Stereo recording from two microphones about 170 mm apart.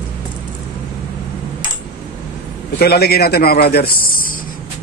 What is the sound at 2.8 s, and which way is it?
A man's voice, 65° left (ahead or behind).